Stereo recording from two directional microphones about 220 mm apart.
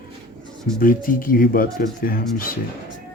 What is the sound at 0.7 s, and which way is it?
Speech, 40° left (ahead or behind).